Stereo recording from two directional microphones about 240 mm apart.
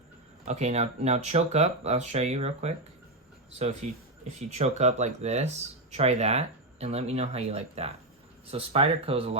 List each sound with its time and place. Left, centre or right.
0.4 s speech: right
4.5 s speech: right